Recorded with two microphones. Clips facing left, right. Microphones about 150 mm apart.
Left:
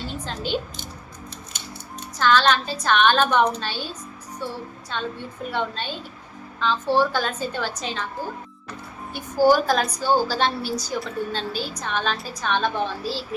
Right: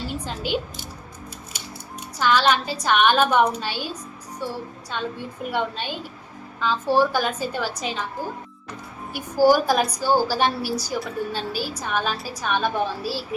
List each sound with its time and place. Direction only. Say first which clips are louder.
0.1 s a woman's voice: even; 10° right (ahead or behind)
2.1 s a woman's voice: left 1 dB; 10° right (ahead or behind)
9.1 s a woman's voice: right 1 dB; 10° right (ahead or behind)